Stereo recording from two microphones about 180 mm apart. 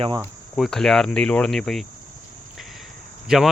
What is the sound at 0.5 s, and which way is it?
Speech, centre (ahead or behind).